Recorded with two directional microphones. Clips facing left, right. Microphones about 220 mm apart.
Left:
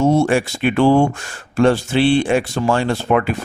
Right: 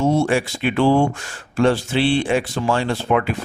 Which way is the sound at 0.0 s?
45° left (ahead or behind).